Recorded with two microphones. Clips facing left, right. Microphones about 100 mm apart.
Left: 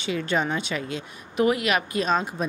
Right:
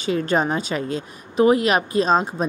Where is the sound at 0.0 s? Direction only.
40° right (ahead or behind).